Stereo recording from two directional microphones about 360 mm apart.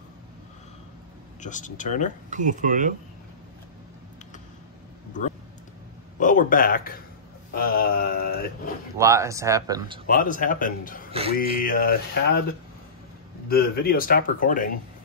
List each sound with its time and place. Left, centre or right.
1.4 s speech: left
2.2 s speech: right
6.1 s speech: left
7.5 s mantra: left
8.9 s speech: centre
10.0 s speech: left
11.1 s speech: centre
11.3 s speech: left
13.5 s speech: left